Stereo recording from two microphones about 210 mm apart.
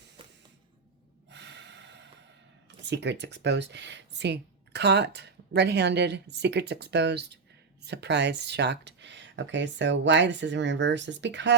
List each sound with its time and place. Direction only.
1.3 s snort: 55° right (ahead or behind)
2.8 s speech: 55° right (ahead or behind)